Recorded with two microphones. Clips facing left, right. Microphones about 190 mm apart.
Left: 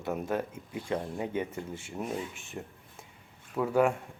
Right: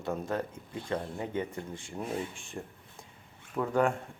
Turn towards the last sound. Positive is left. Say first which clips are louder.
# left 2 dB
turn(degrees=10)  # may be behind; listen again after turning